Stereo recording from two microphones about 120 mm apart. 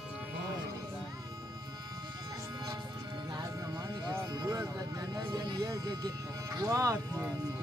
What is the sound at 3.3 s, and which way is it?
Music, 30° right (ahead or behind).